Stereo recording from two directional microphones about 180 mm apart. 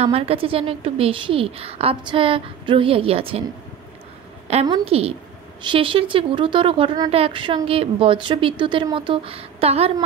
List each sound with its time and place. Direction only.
0.0 s a woman's voice: 35° right (ahead or behind)
4.6 s a woman's voice: 30° right (ahead or behind)